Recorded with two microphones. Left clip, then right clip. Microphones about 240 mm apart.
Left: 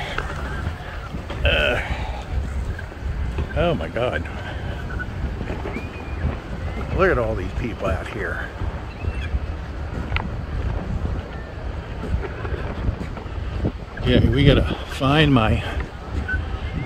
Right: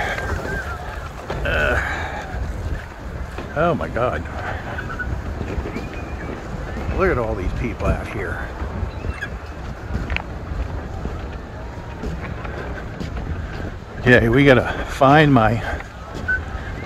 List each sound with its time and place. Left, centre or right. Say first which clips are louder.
1.4 s a sound: even; centre
3.5 s a man's voice: right 3 dB; centre
7.0 s a man's voice: left 1 dB; centre
14.0 s a man's voice: right 6 dB; centre